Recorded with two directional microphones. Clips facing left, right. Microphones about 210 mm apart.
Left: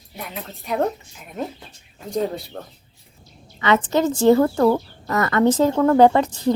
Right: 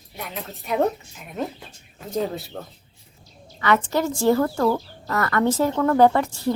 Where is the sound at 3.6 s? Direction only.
20° left (ahead or behind).